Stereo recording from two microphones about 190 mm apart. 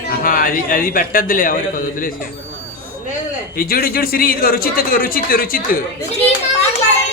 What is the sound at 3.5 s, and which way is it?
A man's voice, 50° left (ahead or behind).